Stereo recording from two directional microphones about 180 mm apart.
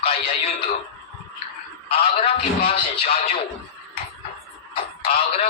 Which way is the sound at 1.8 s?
30° left (ahead or behind).